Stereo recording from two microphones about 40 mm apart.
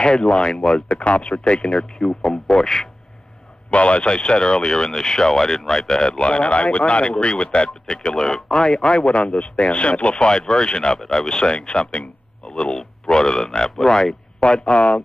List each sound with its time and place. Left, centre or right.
0.0 s a man's voice: left
3.7 s a man's voice: left
14.4 s speech: left